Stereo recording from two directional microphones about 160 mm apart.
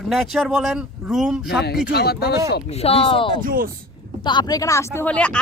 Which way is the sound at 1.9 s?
90° left.